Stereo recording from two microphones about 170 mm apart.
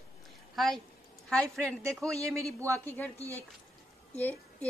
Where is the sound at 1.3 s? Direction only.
5° left (ahead or behind).